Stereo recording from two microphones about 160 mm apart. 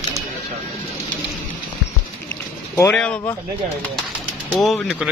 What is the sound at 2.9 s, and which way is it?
Speech, 5° left (ahead or behind).